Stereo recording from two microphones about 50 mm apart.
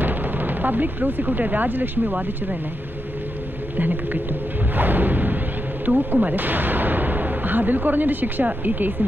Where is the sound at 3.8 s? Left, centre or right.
Right.